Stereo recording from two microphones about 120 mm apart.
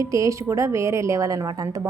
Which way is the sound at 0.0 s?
25° right (ahead or behind).